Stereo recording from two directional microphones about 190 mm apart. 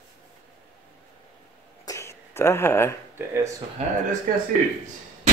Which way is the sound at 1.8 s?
15° left (ahead or behind).